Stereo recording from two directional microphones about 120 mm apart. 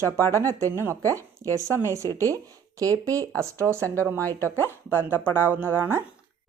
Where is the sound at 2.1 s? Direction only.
25° right (ahead or behind).